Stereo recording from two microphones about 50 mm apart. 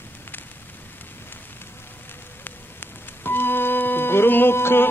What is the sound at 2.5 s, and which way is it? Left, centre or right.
Speech, left.